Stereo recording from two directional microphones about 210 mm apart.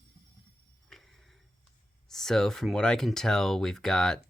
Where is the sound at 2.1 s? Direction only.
Centre (ahead or behind).